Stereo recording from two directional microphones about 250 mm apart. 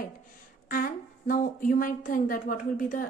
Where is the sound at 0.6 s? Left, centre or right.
Left.